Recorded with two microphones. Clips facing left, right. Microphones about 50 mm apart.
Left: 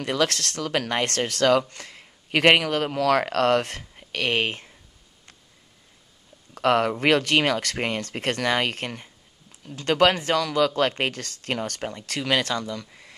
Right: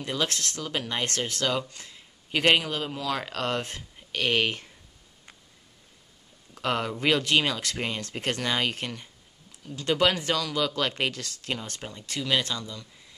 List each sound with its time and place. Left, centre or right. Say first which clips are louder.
0.0 s speech: left 5 dB; left
6.5 s speech: left 8 dB; left